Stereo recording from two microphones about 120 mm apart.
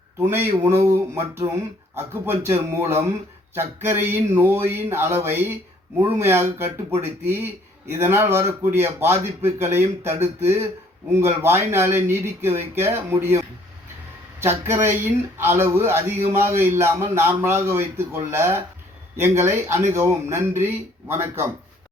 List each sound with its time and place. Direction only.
0.2 s speech: 20° right (ahead or behind)
14.4 s speech: 20° right (ahead or behind)